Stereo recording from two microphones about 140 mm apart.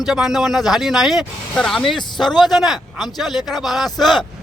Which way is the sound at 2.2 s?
30° left (ahead or behind).